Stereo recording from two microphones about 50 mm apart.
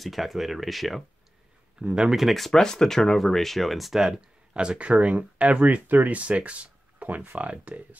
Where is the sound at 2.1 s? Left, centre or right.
Centre.